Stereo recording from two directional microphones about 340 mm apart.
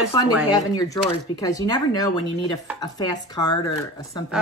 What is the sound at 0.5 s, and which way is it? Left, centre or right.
Speech, centre.